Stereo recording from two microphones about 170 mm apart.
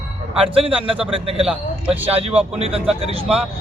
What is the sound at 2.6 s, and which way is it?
Speech, 35° right (ahead or behind).